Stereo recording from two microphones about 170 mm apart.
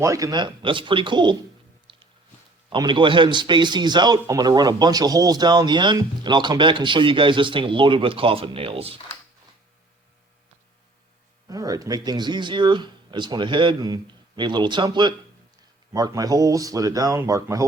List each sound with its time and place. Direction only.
0.0 s a man's voice: 20° right (ahead or behind)
1.9 s a sound: 30° right (ahead or behind)
2.6 s a man's voice: 25° right (ahead or behind)
11.4 s a man's voice: 20° right (ahead or behind)